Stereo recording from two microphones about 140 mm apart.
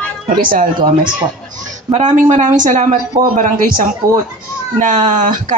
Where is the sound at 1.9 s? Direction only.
60° right (ahead or behind).